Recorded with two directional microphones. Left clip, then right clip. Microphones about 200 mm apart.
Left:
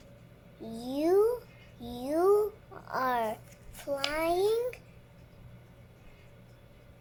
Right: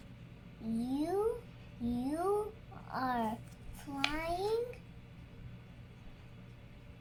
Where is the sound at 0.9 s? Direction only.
40° left (ahead or behind).